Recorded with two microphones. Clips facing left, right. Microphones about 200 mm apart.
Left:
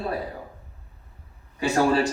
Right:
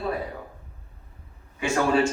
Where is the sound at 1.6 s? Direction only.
35° left (ahead or behind).